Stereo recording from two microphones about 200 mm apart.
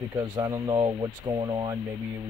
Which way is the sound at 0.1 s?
20° right (ahead or behind).